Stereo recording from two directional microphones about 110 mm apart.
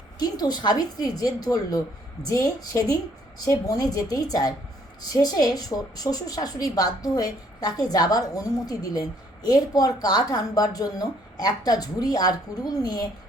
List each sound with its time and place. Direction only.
0.2 s a woman's voice: 40° left (ahead or behind)